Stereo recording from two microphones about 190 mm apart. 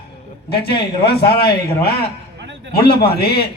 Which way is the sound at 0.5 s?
55° left (ahead or behind).